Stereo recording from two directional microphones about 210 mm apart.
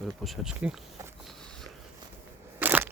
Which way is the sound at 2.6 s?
10° right (ahead or behind).